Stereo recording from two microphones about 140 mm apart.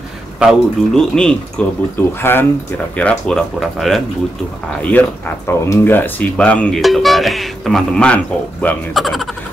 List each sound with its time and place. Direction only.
0.4 s speech: centre (ahead or behind)
5.5 s speech: 20° left (ahead or behind); by 9.3 s centre (ahead or behind)